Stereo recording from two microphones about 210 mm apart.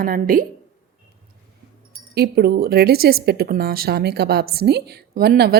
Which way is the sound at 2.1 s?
50° right (ahead or behind).